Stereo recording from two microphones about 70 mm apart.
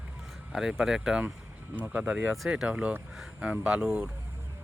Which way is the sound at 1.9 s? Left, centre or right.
Right.